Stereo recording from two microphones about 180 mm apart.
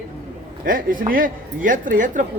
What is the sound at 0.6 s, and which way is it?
A man's voice, 50° right (ahead or behind).